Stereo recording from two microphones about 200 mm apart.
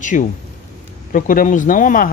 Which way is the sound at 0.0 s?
40° left (ahead or behind).